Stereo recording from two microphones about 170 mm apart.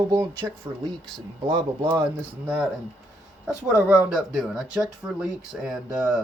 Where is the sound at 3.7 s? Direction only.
10° right (ahead or behind).